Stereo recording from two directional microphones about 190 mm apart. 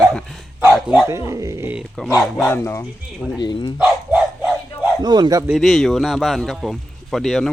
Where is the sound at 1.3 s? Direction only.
15° right (ahead or behind); by 2.8 s 10° left (ahead or behind).